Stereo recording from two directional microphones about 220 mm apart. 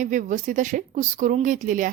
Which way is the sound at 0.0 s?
35° right (ahead or behind).